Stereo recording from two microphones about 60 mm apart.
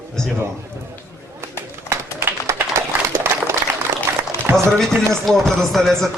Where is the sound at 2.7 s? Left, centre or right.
Right.